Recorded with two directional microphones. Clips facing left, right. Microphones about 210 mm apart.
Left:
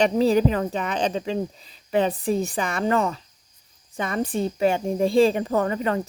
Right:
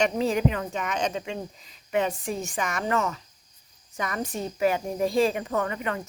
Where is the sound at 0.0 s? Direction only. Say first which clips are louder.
Left 5 dB; 35° left (ahead or behind).